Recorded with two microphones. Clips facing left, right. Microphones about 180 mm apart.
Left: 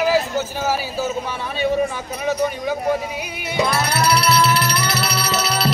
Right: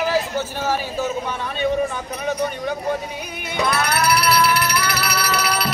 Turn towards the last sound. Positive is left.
turn(degrees=25)  # may be behind; listen again after turning